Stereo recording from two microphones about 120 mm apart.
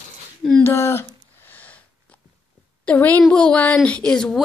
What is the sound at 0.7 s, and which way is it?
Speech, 20° left (ahead or behind).